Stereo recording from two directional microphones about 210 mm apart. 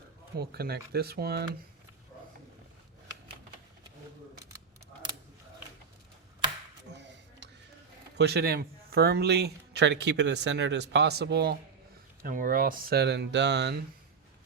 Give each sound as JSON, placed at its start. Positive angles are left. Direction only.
{"t": 0.3, "sound": "speech", "side_deg": -50}
{"t": 6.9, "sound": "a sound", "side_deg": -55}
{"t": 8.1, "sound": "speech", "side_deg": -50}
{"t": 12.2, "sound": "speech", "side_deg": -40}